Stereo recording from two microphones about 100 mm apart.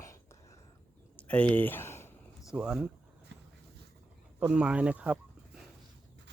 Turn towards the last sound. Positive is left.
turn(degrees=-10)  # may be behind; listen again after turning